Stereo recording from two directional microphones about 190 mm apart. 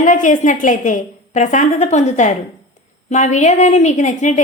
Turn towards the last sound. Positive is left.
turn(degrees=40)  # may be behind; listen again after turning